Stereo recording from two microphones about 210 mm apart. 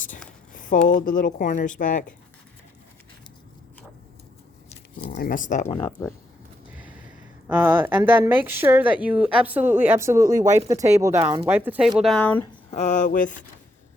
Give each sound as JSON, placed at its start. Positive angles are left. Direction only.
{"t": 0.5, "sound": "a woman's voice", "side_deg": 40}
{"t": 5.0, "sound": "a woman's voice", "side_deg": 40}
{"t": 7.4, "sound": "a woman's voice", "side_deg": -10}
{"t": 12.7, "sound": "a woman's voice", "side_deg": 35}